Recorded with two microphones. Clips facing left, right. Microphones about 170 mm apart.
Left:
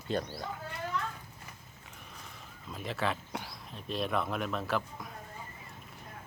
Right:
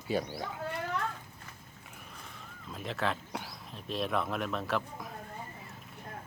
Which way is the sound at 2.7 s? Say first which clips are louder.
Even; centre (ahead or behind).